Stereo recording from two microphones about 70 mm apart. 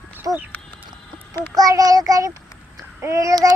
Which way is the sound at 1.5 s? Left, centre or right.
Right.